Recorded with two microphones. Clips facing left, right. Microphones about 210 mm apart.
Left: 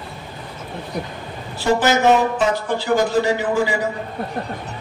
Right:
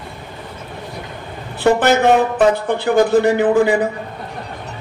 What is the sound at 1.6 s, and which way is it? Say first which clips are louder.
A man's voice: right 4 dB; 60° right (ahead or behind).